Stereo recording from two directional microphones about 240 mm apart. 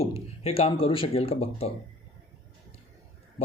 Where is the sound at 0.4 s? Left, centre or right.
Left.